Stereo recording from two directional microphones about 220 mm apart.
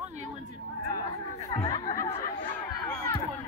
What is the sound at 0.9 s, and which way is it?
Chatter, 20° left (ahead or behind).